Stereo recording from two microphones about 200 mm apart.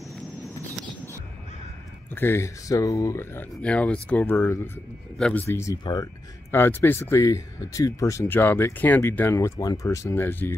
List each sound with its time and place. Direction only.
0.1 s a sound: centre (ahead or behind)
2.0 s speech: 10° left (ahead or behind)
5.5 s speech: 15° left (ahead or behind)